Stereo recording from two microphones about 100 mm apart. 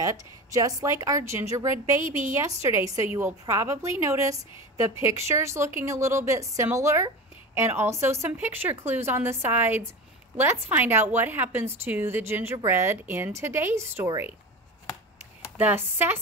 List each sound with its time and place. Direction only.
0.0 s a woman's voice: 35° right (ahead or behind)
15.5 s a woman's voice: 20° right (ahead or behind)